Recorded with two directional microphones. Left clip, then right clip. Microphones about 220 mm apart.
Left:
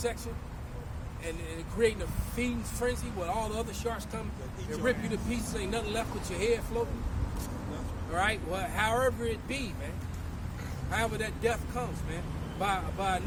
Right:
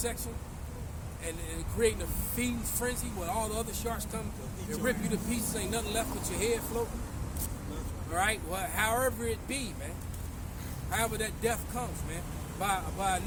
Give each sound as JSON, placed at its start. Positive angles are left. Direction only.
{"t": 1.8, "sound": "speech", "side_deg": -10}
{"t": 8.1, "sound": "speech", "side_deg": -10}
{"t": 10.9, "sound": "speech", "side_deg": -10}